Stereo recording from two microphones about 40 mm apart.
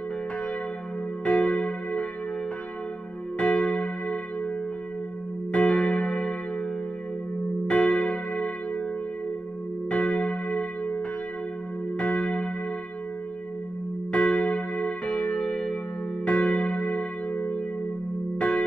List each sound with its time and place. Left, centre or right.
1.2 s church bell: left
3.3 s church bell: left
5.5 s church bell: left
7.6 s church bell: left
9.8 s church bell: left
12.0 s church bell: left
14.1 s church bell: left